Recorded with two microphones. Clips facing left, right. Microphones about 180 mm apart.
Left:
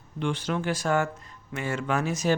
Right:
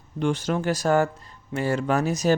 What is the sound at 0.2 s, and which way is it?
Speech, 40° right (ahead or behind).